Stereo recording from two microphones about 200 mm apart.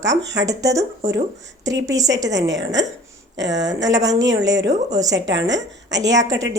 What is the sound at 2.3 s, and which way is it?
A woman's voice, 60° right (ahead or behind).